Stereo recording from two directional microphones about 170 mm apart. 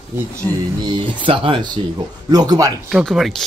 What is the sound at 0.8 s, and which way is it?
Speech, 30° right (ahead or behind).